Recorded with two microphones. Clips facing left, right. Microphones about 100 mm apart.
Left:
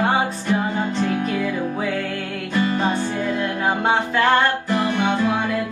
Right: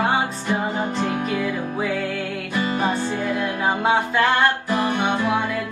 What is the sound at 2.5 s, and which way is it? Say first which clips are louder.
Music: left 2 dB; 15° right (ahead or behind).